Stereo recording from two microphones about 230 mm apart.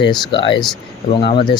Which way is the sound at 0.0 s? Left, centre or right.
Left.